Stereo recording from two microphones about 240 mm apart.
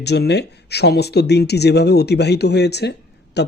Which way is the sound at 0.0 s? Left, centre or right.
Left.